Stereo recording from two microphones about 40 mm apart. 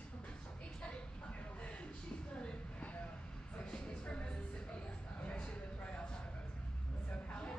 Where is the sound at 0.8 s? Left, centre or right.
Left.